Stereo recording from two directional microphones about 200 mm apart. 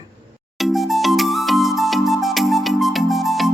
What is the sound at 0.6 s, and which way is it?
Music, centre (ahead or behind).